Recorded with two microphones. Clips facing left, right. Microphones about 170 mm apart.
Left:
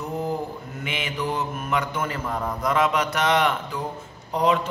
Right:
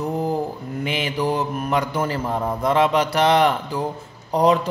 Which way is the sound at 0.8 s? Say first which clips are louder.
Right 5 dB; 35° right (ahead or behind).